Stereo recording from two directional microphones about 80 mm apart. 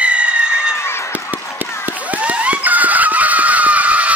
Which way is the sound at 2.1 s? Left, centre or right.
Centre.